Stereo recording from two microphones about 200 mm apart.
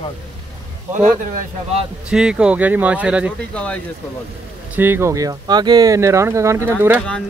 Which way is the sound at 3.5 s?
5° left (ahead or behind).